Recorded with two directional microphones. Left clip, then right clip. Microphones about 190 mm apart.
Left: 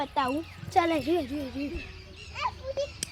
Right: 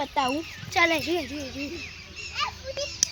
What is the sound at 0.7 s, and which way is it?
Speech, 40° left (ahead or behind).